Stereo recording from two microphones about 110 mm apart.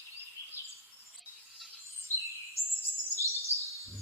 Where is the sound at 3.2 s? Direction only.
25° left (ahead or behind).